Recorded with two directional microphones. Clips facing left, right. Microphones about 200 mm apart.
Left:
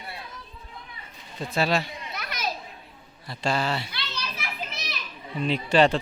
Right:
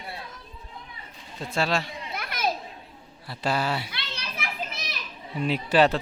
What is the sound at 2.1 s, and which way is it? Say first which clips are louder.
Children playing: right 4 dB; 55° right (ahead or behind).